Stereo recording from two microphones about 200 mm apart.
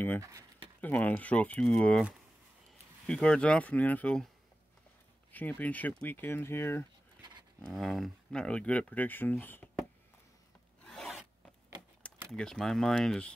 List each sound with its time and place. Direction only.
0.2 s speech: 15° right (ahead or behind)
0.7 s speech: 10° left (ahead or behind)
3.1 s speech: 5° left (ahead or behind)
5.3 s speech: 10° left (ahead or behind)
7.2 s dog: 20° right (ahead or behind)
7.6 s speech: centre (ahead or behind)
10.8 s filing: centre (ahead or behind)
12.3 s speech: centre (ahead or behind)